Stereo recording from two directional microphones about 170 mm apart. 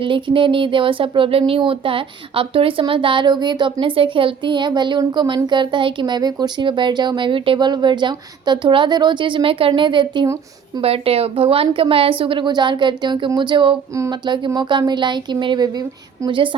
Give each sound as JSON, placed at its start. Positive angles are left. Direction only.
{"t": 0.0, "sound": "a woman's voice", "side_deg": -30}